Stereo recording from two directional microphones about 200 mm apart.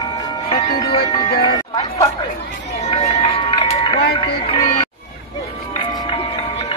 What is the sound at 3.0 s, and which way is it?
Music, 30° left (ahead or behind).